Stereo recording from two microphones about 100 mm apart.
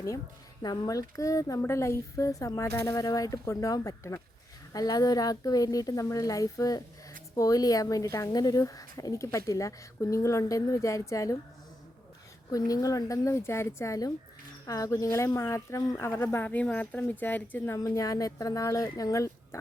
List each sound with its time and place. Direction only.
0.6 s a woman's voice: 40° left (ahead or behind)
2.9 s a woman's voice: 40° left (ahead or behind)
12.5 s a woman's voice: 40° left (ahead or behind); by 17.7 s 15° left (ahead or behind)
17.7 s a woman's voice: 35° left (ahead or behind)